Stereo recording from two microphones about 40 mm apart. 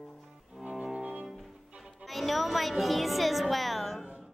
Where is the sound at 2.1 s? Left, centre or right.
Centre.